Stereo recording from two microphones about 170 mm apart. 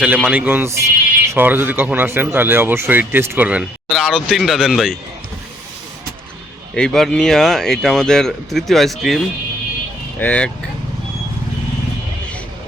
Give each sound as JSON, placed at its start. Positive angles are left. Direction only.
{"t": 0.2, "sound": "speech", "side_deg": -5}
{"t": 6.7, "sound": "speech", "side_deg": 5}